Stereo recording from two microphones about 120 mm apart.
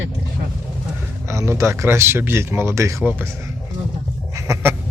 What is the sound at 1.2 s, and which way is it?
Speech, 20° right (ahead or behind).